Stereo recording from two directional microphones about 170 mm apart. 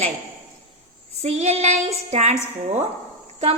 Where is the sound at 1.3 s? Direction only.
40° right (ahead or behind).